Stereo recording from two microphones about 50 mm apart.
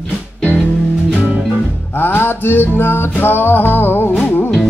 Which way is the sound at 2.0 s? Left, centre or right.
Left.